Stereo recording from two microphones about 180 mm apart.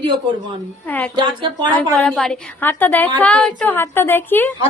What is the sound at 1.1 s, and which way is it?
Speech, 25° right (ahead or behind).